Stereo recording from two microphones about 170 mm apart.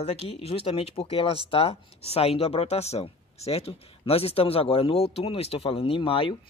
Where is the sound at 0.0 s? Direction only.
35° left (ahead or behind).